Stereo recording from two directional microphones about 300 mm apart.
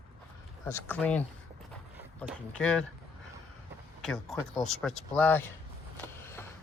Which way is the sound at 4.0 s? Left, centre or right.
Centre.